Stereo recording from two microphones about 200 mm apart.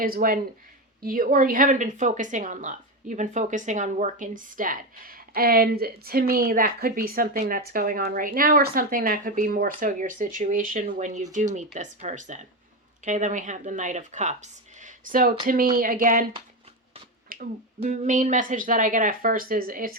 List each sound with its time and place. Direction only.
0.0 s a woman's voice: 45° right (ahead or behind)
17.2 s finger snapping: 45° right (ahead or behind)
17.7 s speech: 40° right (ahead or behind)